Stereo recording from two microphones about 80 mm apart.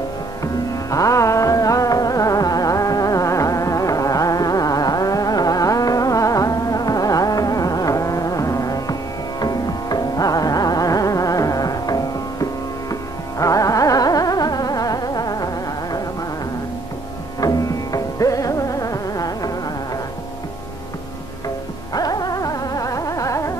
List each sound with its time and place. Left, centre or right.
0.4 s music: left
13.4 s carnatic music: left
17.4 s music: left
21.9 s dog: left